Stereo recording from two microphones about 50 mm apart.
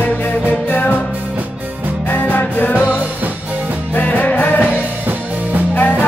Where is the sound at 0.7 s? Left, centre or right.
Left.